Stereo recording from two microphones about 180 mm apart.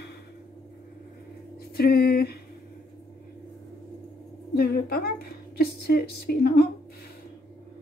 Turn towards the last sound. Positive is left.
turn(degrees=60)  # may be behind; listen again after turning